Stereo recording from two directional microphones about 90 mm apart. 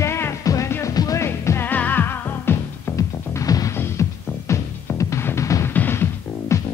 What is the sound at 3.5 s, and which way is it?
Music, 45° left (ahead or behind).